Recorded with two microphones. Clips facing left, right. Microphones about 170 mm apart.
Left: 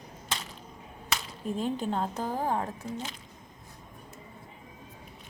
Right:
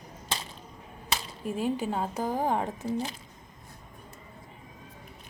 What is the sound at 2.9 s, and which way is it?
Speech, 35° right (ahead or behind).